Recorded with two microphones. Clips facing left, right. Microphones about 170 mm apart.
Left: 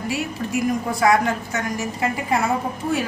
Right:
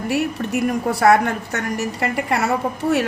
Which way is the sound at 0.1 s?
65° right (ahead or behind).